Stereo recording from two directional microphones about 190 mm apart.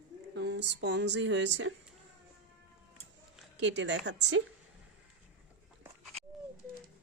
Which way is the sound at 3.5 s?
70° right (ahead or behind).